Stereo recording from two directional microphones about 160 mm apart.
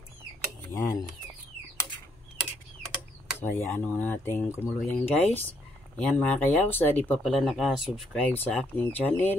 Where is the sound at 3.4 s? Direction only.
15° left (ahead or behind).